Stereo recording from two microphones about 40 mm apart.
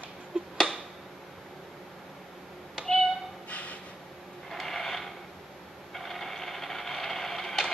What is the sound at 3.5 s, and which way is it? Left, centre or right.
Gasp, left.